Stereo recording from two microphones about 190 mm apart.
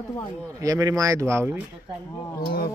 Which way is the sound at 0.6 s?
20° right (ahead or behind).